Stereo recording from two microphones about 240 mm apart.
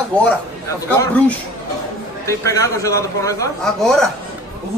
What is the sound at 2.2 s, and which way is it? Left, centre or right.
Speech, centre.